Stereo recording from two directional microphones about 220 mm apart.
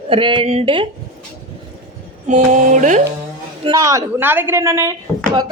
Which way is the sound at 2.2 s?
35° right (ahead or behind).